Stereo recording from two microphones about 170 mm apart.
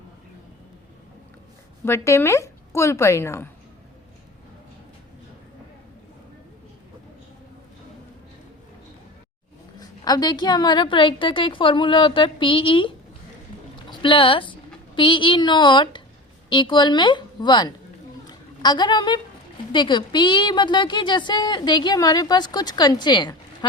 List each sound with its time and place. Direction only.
1.8 s a woman's voice: 15° left (ahead or behind)
9.7 s a woman's voice: 20° left (ahead or behind)
14.0 s a woman's voice: 30° left (ahead or behind)
18.3 s a sound: 25° left (ahead or behind)
19.7 s a woman's voice: 30° left (ahead or behind)